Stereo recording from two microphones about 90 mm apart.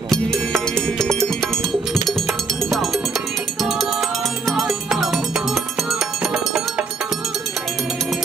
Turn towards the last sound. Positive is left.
turn(degrees=-5)  # may be behind; listen again after turning